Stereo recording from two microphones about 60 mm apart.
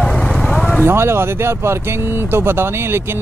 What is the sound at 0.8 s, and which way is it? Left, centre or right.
Speech, right.